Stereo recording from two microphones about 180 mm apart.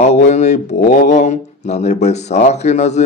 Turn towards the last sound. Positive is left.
turn(degrees=40)  # may be behind; listen again after turning